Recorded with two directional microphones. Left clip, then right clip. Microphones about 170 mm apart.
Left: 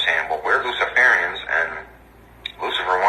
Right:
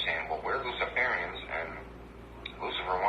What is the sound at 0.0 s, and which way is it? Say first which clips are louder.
Radio: left 12 dB; 35° left (ahead or behind).